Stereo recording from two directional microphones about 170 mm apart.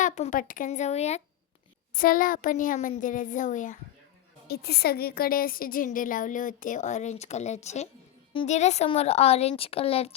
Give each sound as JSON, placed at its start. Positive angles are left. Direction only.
{"t": 0.0, "sound": "a woman's voice", "side_deg": 45}
{"t": 1.9, "sound": "a woman's voice", "side_deg": 55}
{"t": 4.4, "sound": "a woman's voice", "side_deg": 70}